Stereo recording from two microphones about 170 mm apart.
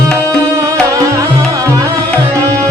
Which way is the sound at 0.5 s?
20° right (ahead or behind).